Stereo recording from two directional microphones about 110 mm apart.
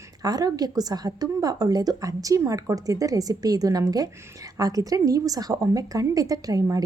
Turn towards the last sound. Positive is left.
turn(degrees=-30)  # may be behind; listen again after turning